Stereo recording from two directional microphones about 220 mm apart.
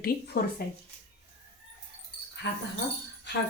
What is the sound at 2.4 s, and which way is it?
Speech, 55° left (ahead or behind).